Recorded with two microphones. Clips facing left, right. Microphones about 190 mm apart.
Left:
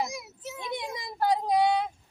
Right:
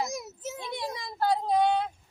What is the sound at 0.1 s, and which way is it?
Children playing, 45° right (ahead or behind).